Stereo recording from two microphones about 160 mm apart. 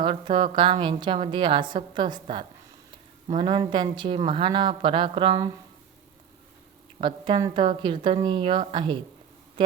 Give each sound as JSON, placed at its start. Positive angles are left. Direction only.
{"t": 0.0, "sound": "a woman's voice", "side_deg": -30}
{"t": 7.0, "sound": "a woman's voice", "side_deg": -30}
{"t": 9.6, "sound": "a sound", "side_deg": -30}